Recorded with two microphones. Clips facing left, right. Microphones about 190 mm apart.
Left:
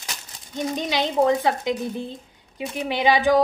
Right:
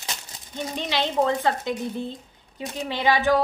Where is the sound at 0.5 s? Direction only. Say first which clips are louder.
Left 3 dB; 15° left (ahead or behind).